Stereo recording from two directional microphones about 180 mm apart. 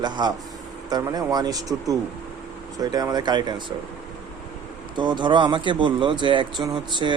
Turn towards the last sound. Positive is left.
turn(degrees=-25)  # may be behind; listen again after turning